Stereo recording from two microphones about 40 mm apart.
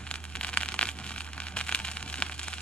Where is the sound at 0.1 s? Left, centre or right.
Left.